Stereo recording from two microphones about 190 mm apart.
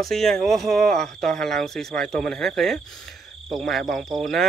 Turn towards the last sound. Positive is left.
turn(degrees=0)  # may be behind; listen again after turning